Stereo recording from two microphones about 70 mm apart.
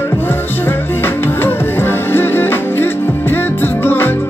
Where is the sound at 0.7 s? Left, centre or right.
Left.